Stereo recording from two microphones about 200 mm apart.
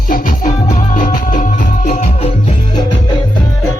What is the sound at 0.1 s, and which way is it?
Music, 40° left (ahead or behind).